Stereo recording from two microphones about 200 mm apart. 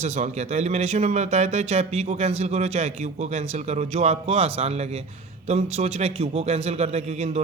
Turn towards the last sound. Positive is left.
turn(degrees=-35)  # may be behind; listen again after turning